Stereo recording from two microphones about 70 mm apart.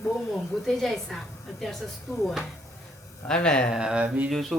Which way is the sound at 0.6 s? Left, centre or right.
Centre.